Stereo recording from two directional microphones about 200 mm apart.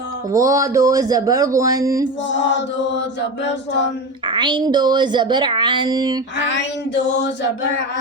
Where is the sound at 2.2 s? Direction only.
65° left (ahead or behind).